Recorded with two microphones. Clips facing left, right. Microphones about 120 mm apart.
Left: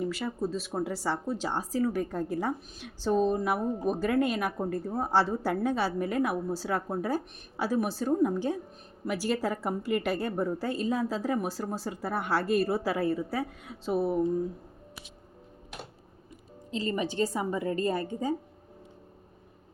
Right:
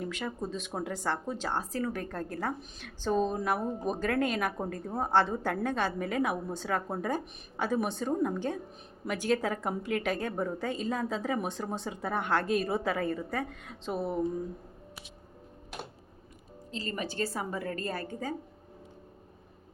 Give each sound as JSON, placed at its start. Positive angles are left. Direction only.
{"t": 0.0, "sound": "a woman's voice", "side_deg": 5}
{"t": 16.7, "sound": "a woman's voice", "side_deg": 20}